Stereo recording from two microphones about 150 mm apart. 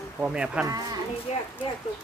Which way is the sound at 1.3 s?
50° left (ahead or behind).